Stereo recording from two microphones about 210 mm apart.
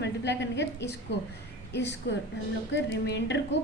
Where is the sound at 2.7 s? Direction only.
55° left (ahead or behind).